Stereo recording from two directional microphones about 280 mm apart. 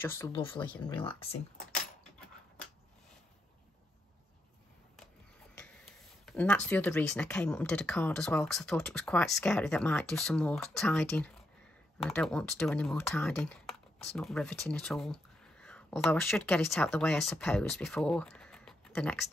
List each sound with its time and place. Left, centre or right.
0.0 s speech: centre
0.6 s speech: centre
1.0 s speech: left
5.6 s speech: centre